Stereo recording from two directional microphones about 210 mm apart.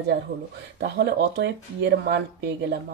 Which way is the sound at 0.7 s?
55° right (ahead or behind).